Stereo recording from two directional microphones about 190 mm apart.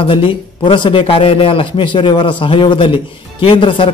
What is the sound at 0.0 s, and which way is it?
A man's voice, 25° left (ahead or behind).